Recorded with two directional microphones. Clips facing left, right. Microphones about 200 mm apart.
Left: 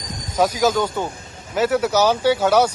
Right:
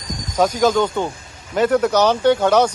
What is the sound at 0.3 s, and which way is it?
Speech, 10° left (ahead or behind).